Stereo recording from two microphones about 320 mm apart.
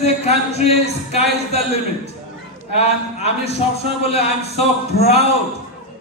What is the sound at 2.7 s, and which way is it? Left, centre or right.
Speech, centre.